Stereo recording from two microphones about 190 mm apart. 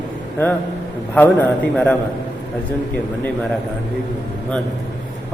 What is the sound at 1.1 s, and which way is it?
Speech, 10° left (ahead or behind).